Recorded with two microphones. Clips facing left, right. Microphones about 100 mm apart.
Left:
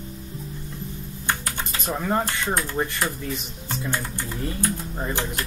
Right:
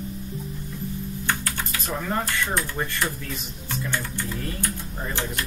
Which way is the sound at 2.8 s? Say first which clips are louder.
Left 2 dB; 20° left (ahead or behind).